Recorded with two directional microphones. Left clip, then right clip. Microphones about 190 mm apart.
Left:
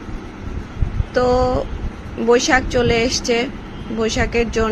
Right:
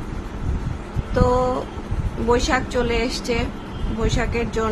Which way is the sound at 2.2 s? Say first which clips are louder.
Left 5 dB; 20° left (ahead or behind).